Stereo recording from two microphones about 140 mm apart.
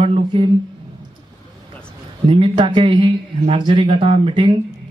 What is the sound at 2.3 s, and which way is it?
A man's voice, 35° right (ahead or behind).